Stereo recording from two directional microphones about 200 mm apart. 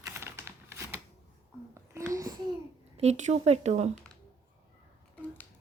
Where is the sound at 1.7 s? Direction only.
15° right (ahead or behind).